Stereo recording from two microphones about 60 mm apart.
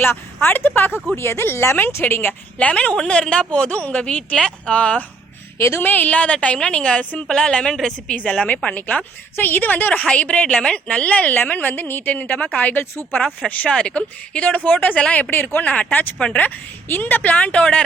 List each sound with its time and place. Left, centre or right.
0.4 s speech: left
2.6 s a woman's voice: left
5.5 s a woman's voice: left
5.8 s a woman's voice: left; by 7.0 s centre
7.0 s a woman's voice: left
7.3 s a woman's voice: centre
8.1 s a woman's voice: left
9.3 s a woman's voice: left
13.7 s a woman's voice: centre
16.1 s a woman's voice: centre
16.9 s a woman's voice: left